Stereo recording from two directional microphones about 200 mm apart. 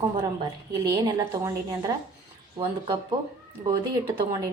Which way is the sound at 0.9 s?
20° right (ahead or behind).